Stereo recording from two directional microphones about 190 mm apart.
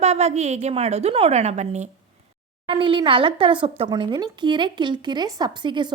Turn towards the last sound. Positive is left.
turn(degrees=-25)  # may be behind; listen again after turning